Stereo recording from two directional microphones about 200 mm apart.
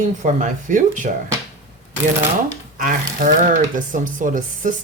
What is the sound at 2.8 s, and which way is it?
Speech, 40° right (ahead or behind).